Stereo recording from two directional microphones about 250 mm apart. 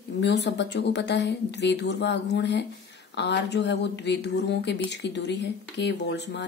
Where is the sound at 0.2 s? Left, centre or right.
Left.